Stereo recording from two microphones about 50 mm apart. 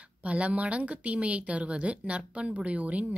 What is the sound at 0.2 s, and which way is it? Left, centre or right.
A woman's voice, right.